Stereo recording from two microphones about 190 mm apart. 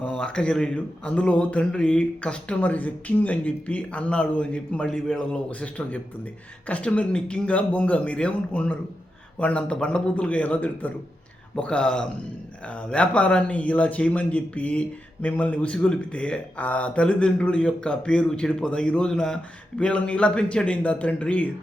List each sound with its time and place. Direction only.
0.0 s speech: 5° left (ahead or behind)